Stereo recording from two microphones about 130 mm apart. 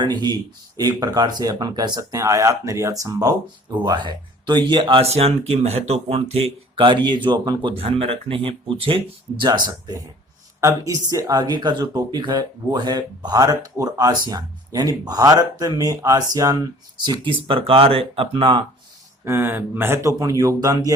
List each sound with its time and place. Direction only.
0.0 s speech: 35° right (ahead or behind)
7.8 s speech: 50° right (ahead or behind)
10.6 s speech: 25° right (ahead or behind)
17.5 s speech: 45° right (ahead or behind)
19.2 s speech: 15° right (ahead or behind)